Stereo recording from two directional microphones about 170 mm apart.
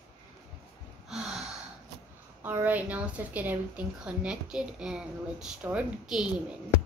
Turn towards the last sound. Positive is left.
turn(degrees=-5)  # may be behind; listen again after turning